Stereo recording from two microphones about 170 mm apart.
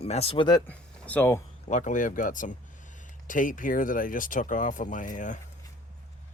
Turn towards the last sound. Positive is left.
turn(degrees=50)  # may be behind; listen again after turning